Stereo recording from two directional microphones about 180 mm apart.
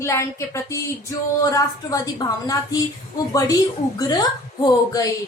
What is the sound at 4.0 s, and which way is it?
Speech, 20° left (ahead or behind).